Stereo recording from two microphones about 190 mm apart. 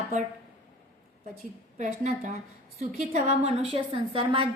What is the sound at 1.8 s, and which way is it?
A woman's voice, 40° right (ahead or behind).